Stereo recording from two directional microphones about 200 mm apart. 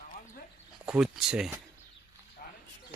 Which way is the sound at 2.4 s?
40° left (ahead or behind).